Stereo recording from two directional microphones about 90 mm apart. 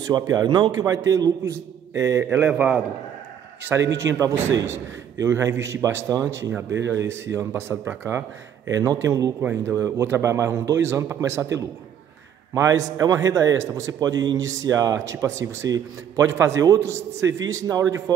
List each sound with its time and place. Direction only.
0.1 s a man's voice: 45° right (ahead or behind)
2.2 s a man's voice: 15° right (ahead or behind)
3.6 s a man's voice: 30° right (ahead or behind)
8.6 s speech: 40° right (ahead or behind)
9.4 s a man's voice: 20° right (ahead or behind)
9.7 s speech: 35° right (ahead or behind)